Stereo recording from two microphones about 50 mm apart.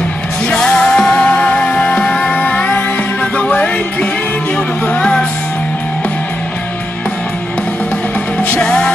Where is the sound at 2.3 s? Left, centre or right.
Left.